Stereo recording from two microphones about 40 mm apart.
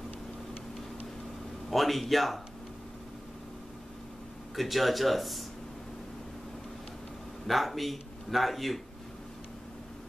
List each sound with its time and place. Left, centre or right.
1.7 s speech: centre
4.6 s speech: centre
7.4 s a man's voice: centre